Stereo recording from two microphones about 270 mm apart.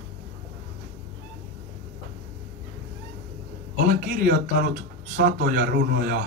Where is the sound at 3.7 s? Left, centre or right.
Right.